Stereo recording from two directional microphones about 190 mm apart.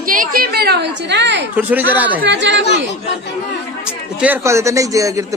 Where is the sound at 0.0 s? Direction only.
45° right (ahead or behind); by 1.5 s 65° right (ahead or behind).